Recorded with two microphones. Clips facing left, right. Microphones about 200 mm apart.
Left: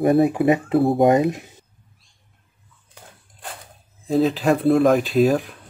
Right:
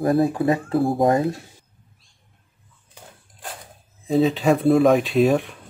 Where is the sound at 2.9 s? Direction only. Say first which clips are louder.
Right 1 dB; centre (ahead or behind).